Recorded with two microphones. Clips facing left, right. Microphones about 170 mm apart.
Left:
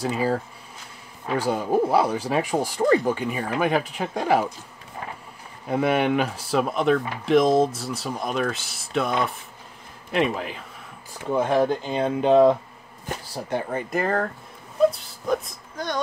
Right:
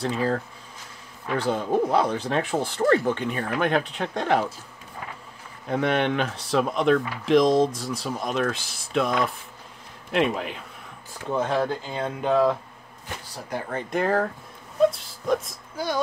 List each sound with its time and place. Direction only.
0.0 s speech: 5° left (ahead or behind)
5.7 s speech: 5° left (ahead or behind)
10.1 s speech: centre (ahead or behind)
11.3 s speech: 15° left (ahead or behind)
13.7 s speech: 5° left (ahead or behind)